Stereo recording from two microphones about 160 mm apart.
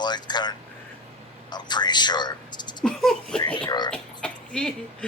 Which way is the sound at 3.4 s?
30° left (ahead or behind).